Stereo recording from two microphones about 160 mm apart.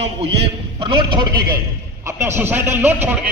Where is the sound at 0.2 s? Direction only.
35° right (ahead or behind).